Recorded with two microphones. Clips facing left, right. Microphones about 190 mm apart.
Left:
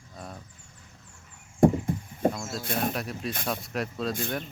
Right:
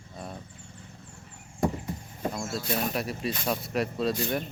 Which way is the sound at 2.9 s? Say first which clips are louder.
Right 2 dB; centre (ahead or behind).